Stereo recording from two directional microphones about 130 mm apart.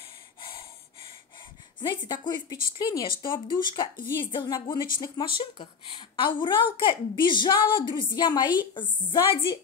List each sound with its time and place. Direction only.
0.4 s snort: 40° left (ahead or behind)
1.8 s a woman's voice: 35° left (ahead or behind)